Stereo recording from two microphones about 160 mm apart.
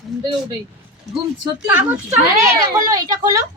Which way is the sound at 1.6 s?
10° right (ahead or behind).